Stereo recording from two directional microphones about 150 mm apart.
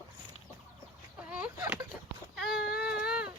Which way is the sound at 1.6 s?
20° right (ahead or behind).